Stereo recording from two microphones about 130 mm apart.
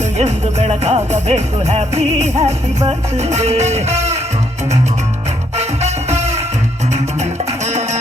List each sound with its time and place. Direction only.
0.2 s music: 60° right (ahead or behind)
5.5 s music: 60° right (ahead or behind)